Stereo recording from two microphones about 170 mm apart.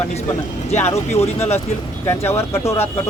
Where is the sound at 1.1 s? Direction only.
40° left (ahead or behind).